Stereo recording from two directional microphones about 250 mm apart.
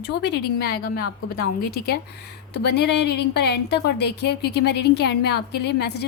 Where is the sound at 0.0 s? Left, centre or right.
Left.